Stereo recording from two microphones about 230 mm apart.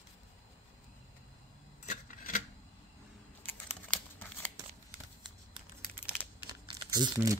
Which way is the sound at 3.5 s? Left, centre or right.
Centre.